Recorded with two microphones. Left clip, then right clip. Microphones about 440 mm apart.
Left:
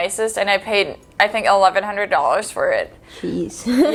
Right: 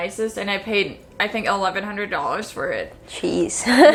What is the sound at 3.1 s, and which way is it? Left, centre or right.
Speech, right.